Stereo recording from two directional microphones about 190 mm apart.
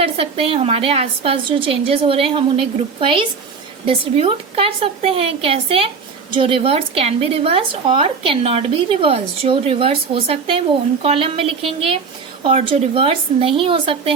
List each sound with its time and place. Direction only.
0.0 s a woman's voice: 30° right (ahead or behind)